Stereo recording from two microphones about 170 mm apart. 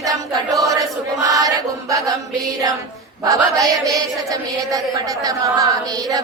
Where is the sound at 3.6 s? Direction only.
20° right (ahead or behind).